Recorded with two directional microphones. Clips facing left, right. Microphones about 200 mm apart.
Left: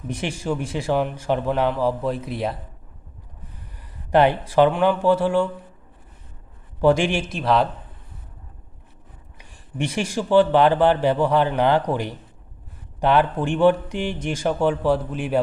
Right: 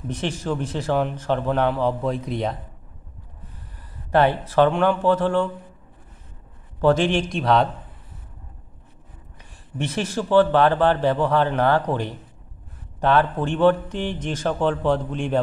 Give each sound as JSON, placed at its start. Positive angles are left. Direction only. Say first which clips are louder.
{"t": 0.1, "sound": "speech", "louder": "even", "side_deg": 10}
{"t": 4.1, "sound": "speech", "louder": "left 1 dB", "side_deg": 15}
{"t": 6.8, "sound": "a man's voice", "louder": "even", "side_deg": 10}
{"t": 9.4, "sound": "speech", "louder": "left 2 dB", "side_deg": 10}